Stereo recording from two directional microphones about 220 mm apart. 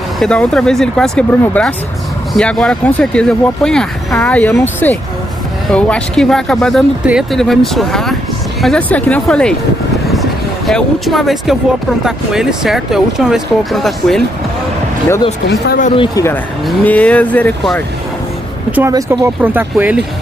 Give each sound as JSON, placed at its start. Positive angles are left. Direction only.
{"t": 0.2, "sound": "speech", "side_deg": 5}
{"t": 10.7, "sound": "speech", "side_deg": 0}
{"t": 15.6, "sound": "speech", "side_deg": 45}
{"t": 16.0, "sound": "speech", "side_deg": 15}
{"t": 18.7, "sound": "speech", "side_deg": -10}